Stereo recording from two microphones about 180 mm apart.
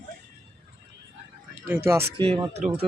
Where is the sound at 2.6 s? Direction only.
45° right (ahead or behind).